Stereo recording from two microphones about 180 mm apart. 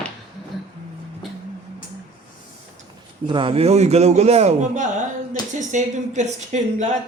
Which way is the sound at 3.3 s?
30° right (ahead or behind).